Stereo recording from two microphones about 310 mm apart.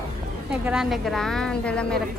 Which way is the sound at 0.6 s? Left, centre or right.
Centre.